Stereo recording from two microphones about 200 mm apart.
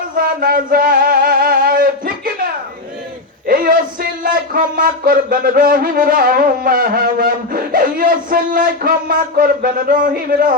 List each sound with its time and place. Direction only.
0.3 s music: 45° right (ahead or behind)
3.4 s a sound: 45° right (ahead or behind)
4.2 s music: 45° right (ahead or behind)